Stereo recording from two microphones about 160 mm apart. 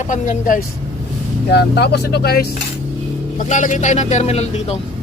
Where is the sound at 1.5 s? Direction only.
90° left.